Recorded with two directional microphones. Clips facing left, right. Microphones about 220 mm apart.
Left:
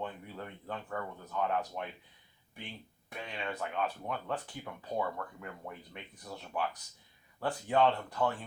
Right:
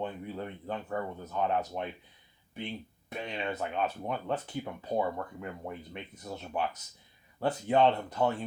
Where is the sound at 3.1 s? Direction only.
20° right (ahead or behind).